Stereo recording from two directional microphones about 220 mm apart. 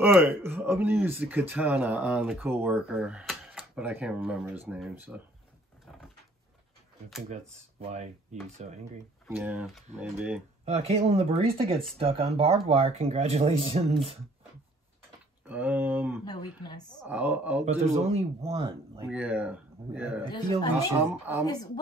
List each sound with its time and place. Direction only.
0.0 s speech: 5° right (ahead or behind)
7.9 s cutlery: 30° right (ahead or behind)
9.3 s speech: 10° right (ahead or behind)
10.6 s speech: 30° right (ahead or behind)
15.4 s speech: 5° right (ahead or behind)
16.3 s speech: 20° left (ahead or behind)
17.0 s speech: 10° right (ahead or behind)
17.6 s speech: 30° right (ahead or behind)
19.0 s speech: 5° right (ahead or behind)
20.2 s speech: 20° left (ahead or behind)
21.0 s speech: 10° right (ahead or behind)